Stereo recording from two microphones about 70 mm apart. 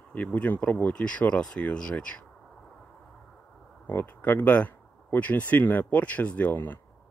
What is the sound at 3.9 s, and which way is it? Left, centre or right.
Speech, left.